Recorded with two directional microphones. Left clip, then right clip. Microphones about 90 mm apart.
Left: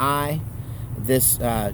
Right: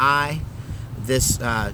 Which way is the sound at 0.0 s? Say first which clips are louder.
Right 4 dB; 30° right (ahead or behind).